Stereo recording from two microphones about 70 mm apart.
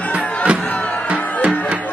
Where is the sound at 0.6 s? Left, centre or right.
Centre.